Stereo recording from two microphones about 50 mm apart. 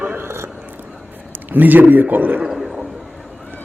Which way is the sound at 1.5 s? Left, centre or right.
Right.